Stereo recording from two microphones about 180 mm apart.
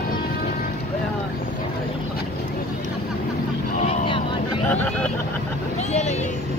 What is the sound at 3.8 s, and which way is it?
Vehicle, 30° left (ahead or behind).